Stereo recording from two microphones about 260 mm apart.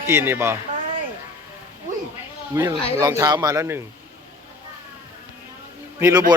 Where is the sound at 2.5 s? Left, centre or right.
Centre.